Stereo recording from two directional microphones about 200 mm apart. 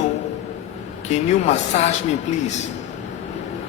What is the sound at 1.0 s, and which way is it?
Speech, 35° left (ahead or behind).